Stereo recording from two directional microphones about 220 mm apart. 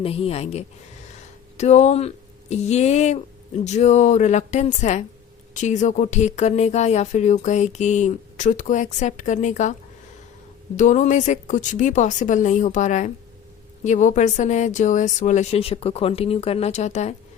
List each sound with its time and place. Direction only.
0.0 s a woman's voice: 25° left (ahead or behind)
10.8 s speech: 35° left (ahead or behind)